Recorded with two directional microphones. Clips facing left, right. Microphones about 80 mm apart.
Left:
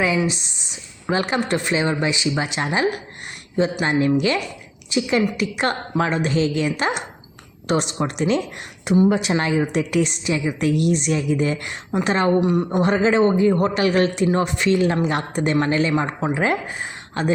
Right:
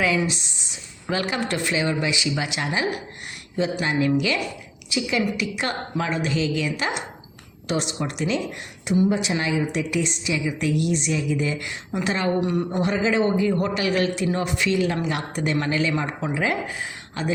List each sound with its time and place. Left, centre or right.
1.0 s a man's voice: left
3.8 s a man's voice: left
8.8 s a woman's voice: left
9.0 s speech: left
9.3 s a woman's voice: left
12.4 s speech: centre
12.8 s a man's voice: left